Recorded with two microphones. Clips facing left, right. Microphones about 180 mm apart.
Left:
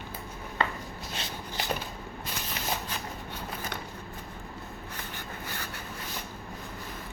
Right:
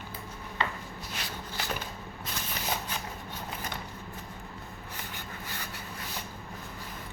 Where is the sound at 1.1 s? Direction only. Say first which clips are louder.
Left 2 dB; 25° left (ahead or behind).